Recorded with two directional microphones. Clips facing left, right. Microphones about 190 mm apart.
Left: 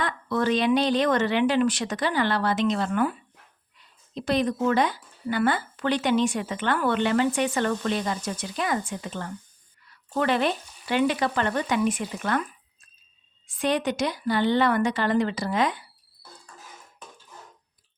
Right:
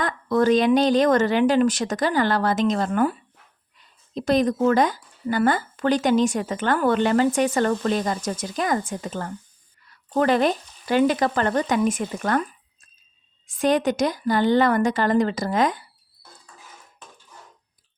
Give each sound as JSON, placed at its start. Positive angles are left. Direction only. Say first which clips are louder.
{"t": 0.0, "sound": "speech", "louder": "right 5 dB", "side_deg": -45}